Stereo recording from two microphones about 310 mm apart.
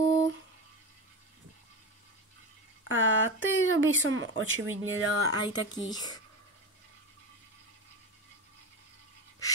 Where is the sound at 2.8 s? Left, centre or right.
Right.